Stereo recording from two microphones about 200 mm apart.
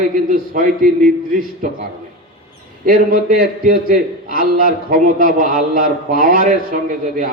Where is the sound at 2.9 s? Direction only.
45° right (ahead or behind).